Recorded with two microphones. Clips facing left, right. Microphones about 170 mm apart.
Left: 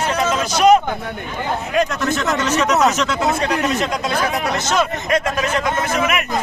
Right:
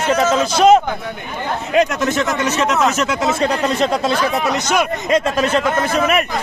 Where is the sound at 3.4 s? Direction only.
30° right (ahead or behind).